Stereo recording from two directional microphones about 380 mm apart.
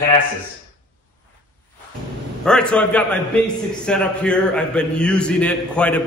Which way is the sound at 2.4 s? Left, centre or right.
Centre.